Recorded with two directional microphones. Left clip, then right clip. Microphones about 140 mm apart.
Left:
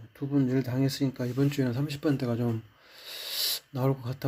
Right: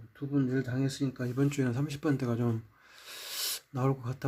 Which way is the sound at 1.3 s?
20° right (ahead or behind).